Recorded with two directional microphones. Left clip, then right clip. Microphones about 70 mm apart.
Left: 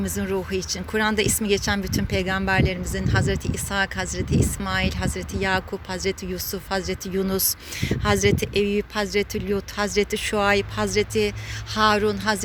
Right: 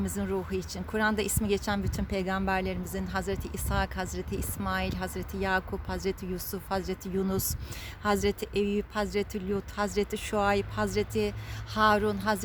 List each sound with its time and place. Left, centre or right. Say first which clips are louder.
0.0 s speech: left 6 dB; centre; by 7.3 s right
7.3 s speech: left 8 dB; right